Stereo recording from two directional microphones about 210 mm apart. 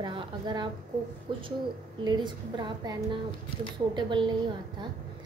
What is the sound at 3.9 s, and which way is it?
Speech, 20° right (ahead or behind).